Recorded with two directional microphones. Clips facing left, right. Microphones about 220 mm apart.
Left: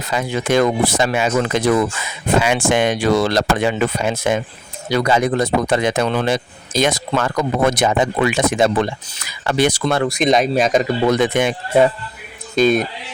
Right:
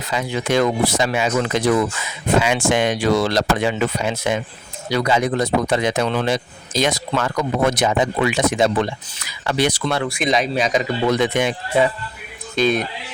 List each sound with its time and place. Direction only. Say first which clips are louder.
0.1 s speech: left 2 dB; 50° left (ahead or behind)